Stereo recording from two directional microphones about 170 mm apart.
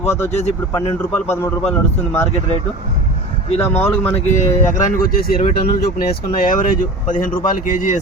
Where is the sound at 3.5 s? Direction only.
35° left (ahead or behind).